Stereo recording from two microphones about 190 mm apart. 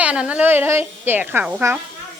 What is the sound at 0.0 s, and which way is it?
A woman's voice, 5° right (ahead or behind).